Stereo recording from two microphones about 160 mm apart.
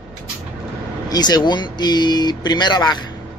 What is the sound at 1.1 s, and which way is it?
Speech, 25° left (ahead or behind).